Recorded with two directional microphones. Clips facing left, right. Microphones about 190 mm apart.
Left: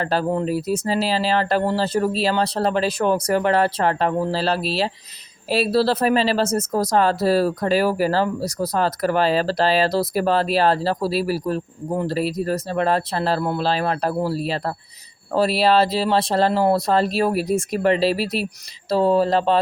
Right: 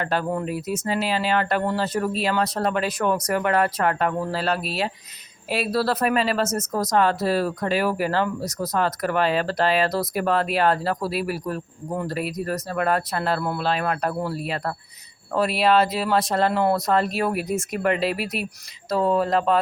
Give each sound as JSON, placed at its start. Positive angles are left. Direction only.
{"t": 0.0, "sound": "speech", "side_deg": 35}